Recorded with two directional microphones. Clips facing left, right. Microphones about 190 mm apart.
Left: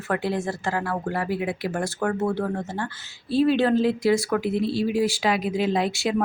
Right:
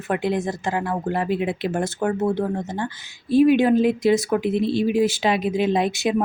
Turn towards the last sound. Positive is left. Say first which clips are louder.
# right 3 dB
turn(degrees=-20)  # may be behind; listen again after turning